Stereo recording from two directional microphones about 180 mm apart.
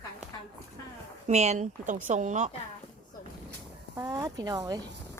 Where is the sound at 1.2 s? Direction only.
40° right (ahead or behind).